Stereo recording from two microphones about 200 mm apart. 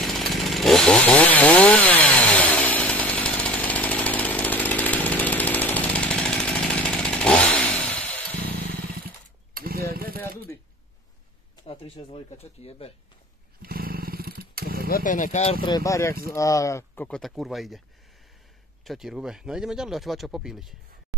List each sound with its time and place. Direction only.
0.0 s chainsaw: centre (ahead or behind)
9.0 s mechanisms: 50° right (ahead or behind)
11.6 s speech: 30° left (ahead or behind)
13.6 s wild animals: 50° right (ahead or behind)
14.9 s speech: 45° left (ahead or behind)
15.6 s speech: 20° left (ahead or behind); by 17.8 s centre (ahead or behind)
18.9 s speech: centre (ahead or behind)